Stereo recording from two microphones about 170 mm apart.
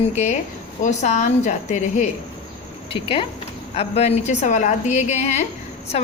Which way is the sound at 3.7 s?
40° left (ahead or behind).